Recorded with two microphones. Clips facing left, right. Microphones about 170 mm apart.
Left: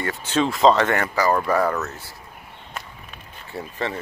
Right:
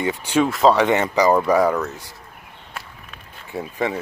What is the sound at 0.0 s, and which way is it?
Speech, 15° right (ahead or behind).